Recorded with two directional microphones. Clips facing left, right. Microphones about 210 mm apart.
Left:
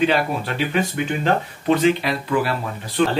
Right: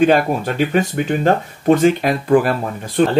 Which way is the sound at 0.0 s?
45° right (ahead or behind).